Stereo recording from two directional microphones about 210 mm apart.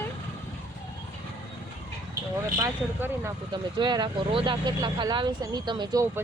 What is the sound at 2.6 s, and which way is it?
Speech, 10° right (ahead or behind).